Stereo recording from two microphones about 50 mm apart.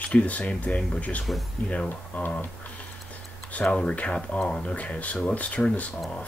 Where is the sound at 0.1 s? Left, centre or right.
Left.